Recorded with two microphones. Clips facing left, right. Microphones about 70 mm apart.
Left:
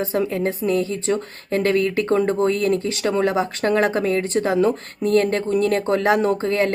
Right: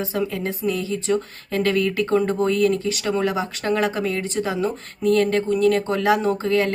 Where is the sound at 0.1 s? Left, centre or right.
Left.